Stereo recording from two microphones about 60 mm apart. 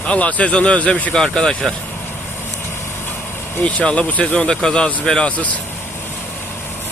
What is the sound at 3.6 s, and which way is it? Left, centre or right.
Speech, centre.